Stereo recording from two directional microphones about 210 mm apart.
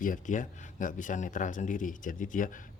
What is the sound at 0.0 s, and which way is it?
Speech, 40° left (ahead or behind).